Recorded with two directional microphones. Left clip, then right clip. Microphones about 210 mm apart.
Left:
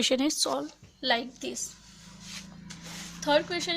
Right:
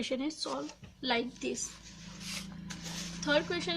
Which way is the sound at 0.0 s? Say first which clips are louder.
Left 9 dB; 50° left (ahead or behind).